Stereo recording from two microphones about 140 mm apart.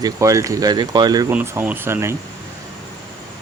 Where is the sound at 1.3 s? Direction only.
15° right (ahead or behind).